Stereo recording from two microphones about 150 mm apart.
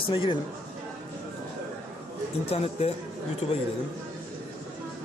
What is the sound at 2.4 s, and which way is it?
Speech, 40° left (ahead or behind).